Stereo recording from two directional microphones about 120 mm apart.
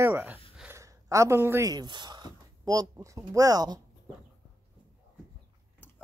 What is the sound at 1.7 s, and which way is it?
Speech, 35° right (ahead or behind).